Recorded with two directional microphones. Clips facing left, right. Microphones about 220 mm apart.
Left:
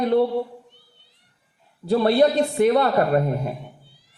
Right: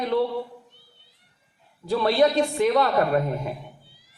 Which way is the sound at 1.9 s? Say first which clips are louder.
Left 3 dB; 40° left (ahead or behind).